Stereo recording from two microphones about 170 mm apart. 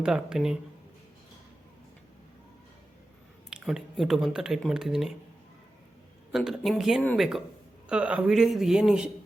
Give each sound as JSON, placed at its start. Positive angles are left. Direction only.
{"t": 0.0, "sound": "speech", "side_deg": -5}
{"t": 3.5, "sound": "speech", "side_deg": -5}
{"t": 6.3, "sound": "speech", "side_deg": 0}